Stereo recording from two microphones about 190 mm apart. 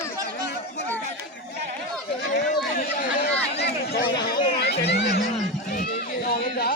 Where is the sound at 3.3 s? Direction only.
60° left (ahead or behind).